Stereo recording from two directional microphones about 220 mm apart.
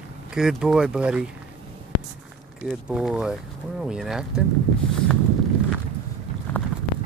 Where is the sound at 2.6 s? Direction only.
5° right (ahead or behind).